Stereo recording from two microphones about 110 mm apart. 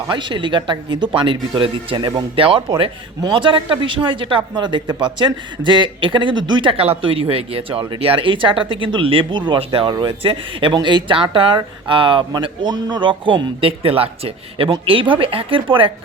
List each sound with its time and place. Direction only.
0.1 s speech: 45° right (ahead or behind)
2.0 s speech: 35° right (ahead or behind)
2.3 s speech: 55° right (ahead or behind)